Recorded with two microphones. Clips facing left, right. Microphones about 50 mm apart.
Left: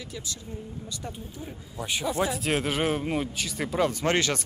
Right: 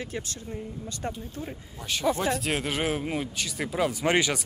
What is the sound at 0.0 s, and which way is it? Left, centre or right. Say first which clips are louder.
Speech: right 4 dB; right.